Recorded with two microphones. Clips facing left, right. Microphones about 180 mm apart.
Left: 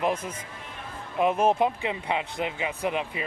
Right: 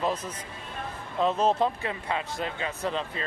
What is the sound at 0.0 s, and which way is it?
Speech, 10° left (ahead or behind).